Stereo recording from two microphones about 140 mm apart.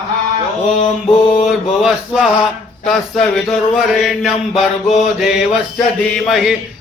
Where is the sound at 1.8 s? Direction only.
5° right (ahead or behind).